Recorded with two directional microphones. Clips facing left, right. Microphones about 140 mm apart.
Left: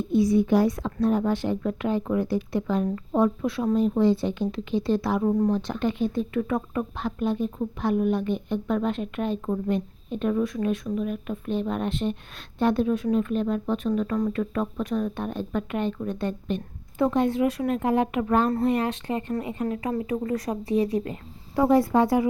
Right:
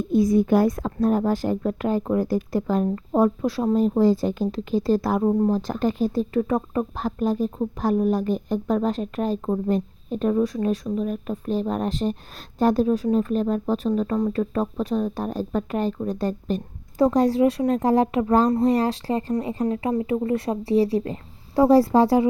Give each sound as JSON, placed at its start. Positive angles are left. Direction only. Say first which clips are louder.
{"t": 0.1, "sound": "a woman's voice", "louder": "right 2 dB", "side_deg": -45}
{"t": 5.2, "sound": "a woman's voice", "louder": "right 2 dB", "side_deg": -30}